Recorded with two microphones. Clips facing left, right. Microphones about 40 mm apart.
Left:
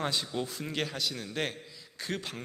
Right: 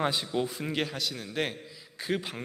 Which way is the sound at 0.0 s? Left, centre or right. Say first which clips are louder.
Right 4 dB; centre.